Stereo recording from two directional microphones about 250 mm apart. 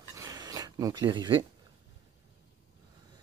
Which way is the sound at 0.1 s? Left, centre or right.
Centre.